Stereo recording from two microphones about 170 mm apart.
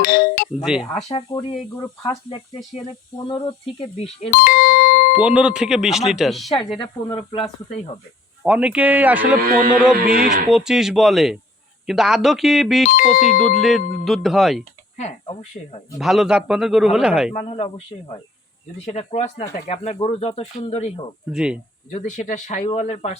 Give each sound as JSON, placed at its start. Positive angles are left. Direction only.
{"t": 0.0, "sound": "music", "side_deg": 60}
{"t": 0.6, "sound": "speech", "side_deg": -5}
{"t": 1.3, "sound": "speech", "side_deg": 25}
{"t": 4.3, "sound": "speech", "side_deg": 60}
{"t": 5.1, "sound": "speech", "side_deg": -5}
{"t": 6.7, "sound": "speech", "side_deg": 30}
{"t": 8.4, "sound": "speech", "side_deg": -5}
{"t": 9.4, "sound": "speech", "side_deg": -55}
{"t": 10.5, "sound": "speech", "side_deg": -5}
{"t": 16.0, "sound": "speech", "side_deg": 0}
{"t": 17.3, "sound": "speech", "side_deg": 40}
{"t": 21.3, "sound": "speech", "side_deg": -5}
{"t": 21.8, "sound": "speech", "side_deg": 45}